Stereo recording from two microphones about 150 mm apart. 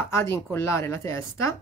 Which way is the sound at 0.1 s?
15° left (ahead or behind).